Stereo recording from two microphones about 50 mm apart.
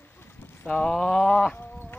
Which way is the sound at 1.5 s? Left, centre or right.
Left.